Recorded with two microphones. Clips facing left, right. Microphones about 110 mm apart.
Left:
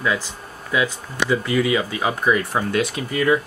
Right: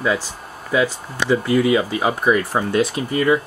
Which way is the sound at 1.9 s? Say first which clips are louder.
Right 2 dB; 10° right (ahead or behind).